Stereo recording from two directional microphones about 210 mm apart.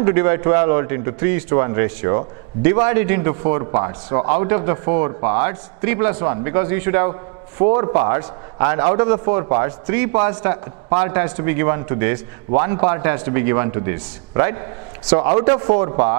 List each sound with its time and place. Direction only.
0.0 s a man's voice: 15° right (ahead or behind)